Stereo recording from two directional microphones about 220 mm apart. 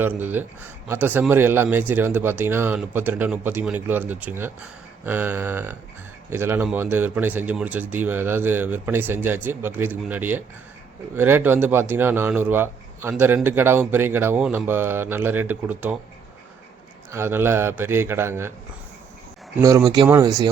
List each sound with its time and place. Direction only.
0.0 s speech: 10° right (ahead or behind)
17.1 s speech: 10° right (ahead or behind)
19.5 s speech: 15° right (ahead or behind)